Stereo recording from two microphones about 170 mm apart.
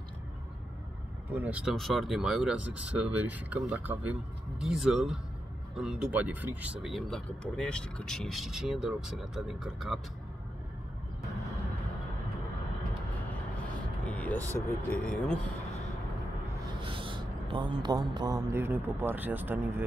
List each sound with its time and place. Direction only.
1.3 s speech: 10° right (ahead or behind)
13.7 s speech: 10° left (ahead or behind)
16.8 s speech: 30° right (ahead or behind); by 19.8 s 10° right (ahead or behind)